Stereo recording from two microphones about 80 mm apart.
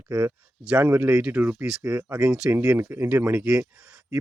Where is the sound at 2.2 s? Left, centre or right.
Centre.